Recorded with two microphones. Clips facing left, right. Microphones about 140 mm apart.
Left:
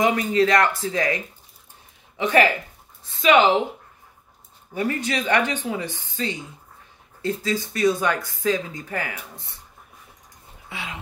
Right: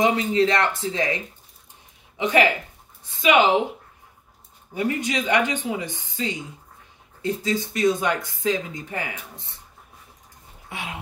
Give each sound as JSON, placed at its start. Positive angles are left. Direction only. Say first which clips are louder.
{"t": 0.0, "sound": "speech", "louder": "even", "side_deg": -20}
{"t": 4.7, "sound": "speech", "louder": "even", "side_deg": -15}
{"t": 10.7, "sound": "speech", "louder": "right 1 dB", "side_deg": -55}